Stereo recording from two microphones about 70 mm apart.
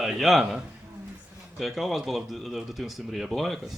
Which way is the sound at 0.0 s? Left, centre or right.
Centre.